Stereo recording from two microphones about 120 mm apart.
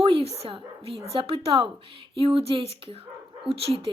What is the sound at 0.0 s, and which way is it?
Dog, 50° right (ahead or behind).